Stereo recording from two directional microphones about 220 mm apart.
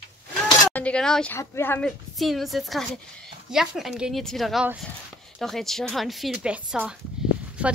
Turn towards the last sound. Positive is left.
turn(degrees=-5)  # may be behind; listen again after turning